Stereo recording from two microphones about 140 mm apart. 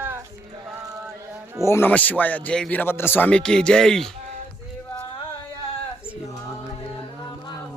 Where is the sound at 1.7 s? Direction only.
15° left (ahead or behind).